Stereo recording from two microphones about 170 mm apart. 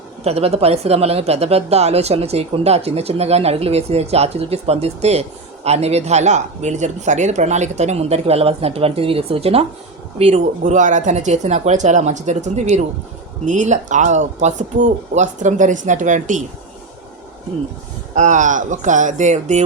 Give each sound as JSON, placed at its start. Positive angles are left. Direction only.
{"t": 0.3, "sound": "speech", "side_deg": -35}
{"t": 18.1, "sound": "speech", "side_deg": -45}